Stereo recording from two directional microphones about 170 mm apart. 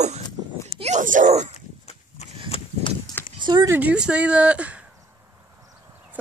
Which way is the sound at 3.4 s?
25° right (ahead or behind).